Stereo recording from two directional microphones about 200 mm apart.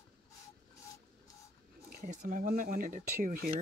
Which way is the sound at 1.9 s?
35° right (ahead or behind).